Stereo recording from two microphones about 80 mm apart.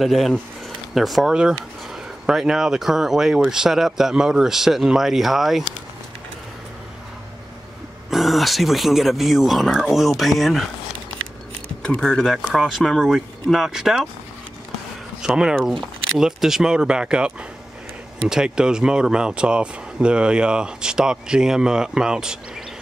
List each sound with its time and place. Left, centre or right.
0.0 s speech: centre
8.1 s speech: centre
11.8 s speech: centre
15.2 s speech: centre